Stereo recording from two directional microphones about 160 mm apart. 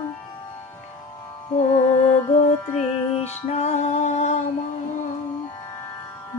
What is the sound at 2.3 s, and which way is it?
Music, 45° left (ahead or behind).